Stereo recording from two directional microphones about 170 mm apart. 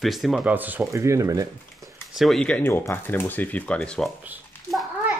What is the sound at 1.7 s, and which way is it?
Speech, centre (ahead or behind).